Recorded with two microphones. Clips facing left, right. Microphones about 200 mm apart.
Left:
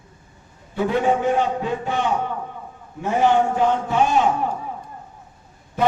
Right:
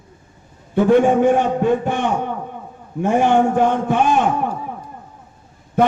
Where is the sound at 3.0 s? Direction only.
50° right (ahead or behind).